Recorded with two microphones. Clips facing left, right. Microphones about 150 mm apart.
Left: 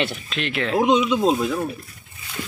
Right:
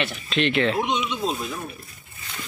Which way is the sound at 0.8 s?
90° left.